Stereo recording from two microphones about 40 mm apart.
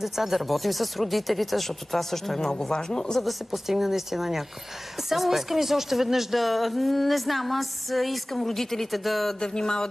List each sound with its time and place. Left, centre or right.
0.0 s speech: centre
2.7 s speech: centre
3.3 s a woman's voice: centre
9.4 s a sound: centre